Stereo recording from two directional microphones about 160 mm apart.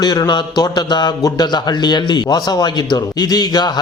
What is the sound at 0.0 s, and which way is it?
Speech, 25° left (ahead or behind).